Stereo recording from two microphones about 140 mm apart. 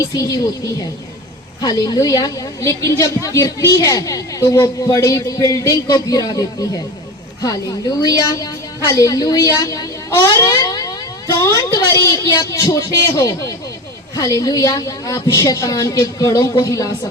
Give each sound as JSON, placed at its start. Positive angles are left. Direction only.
{"t": 0.0, "sound": "a woman's voice", "side_deg": 25}